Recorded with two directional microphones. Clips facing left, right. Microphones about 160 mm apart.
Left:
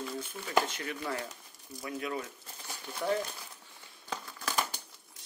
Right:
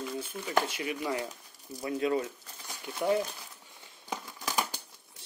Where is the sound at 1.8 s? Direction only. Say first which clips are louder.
Right 7 dB; 25° right (ahead or behind).